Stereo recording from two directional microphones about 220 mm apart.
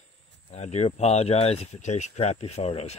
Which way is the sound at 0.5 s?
30° left (ahead or behind).